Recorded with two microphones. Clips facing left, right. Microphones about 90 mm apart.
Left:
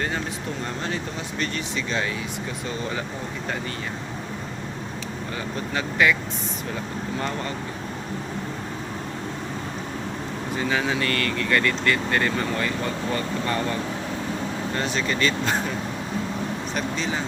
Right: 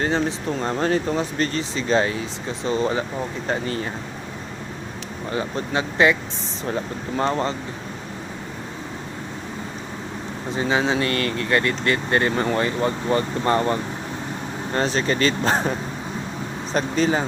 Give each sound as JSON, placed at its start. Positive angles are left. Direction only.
{"t": 0.0, "sound": "speech", "side_deg": -30}
{"t": 0.8, "sound": "speech", "side_deg": -40}
{"t": 5.7, "sound": "speech", "side_deg": -25}
{"t": 7.2, "sound": "speech", "side_deg": -30}
{"t": 10.5, "sound": "speech", "side_deg": -20}
{"t": 14.8, "sound": "speech", "side_deg": -35}
{"t": 16.7, "sound": "speech", "side_deg": -40}